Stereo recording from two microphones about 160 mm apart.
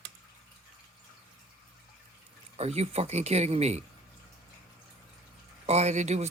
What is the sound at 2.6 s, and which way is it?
Speech, 40° right (ahead or behind).